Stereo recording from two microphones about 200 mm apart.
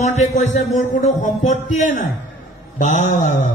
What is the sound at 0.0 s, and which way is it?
Music, 35° left (ahead or behind).